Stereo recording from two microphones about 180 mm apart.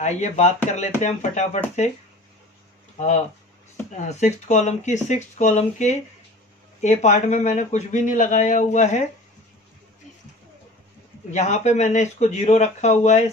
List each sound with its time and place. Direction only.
0.0 s speech: 40° left (ahead or behind)
3.9 s speech: 40° left (ahead or behind)
11.3 s speech: 40° left (ahead or behind)